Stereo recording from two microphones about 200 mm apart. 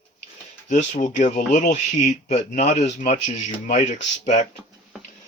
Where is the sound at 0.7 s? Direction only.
40° left (ahead or behind).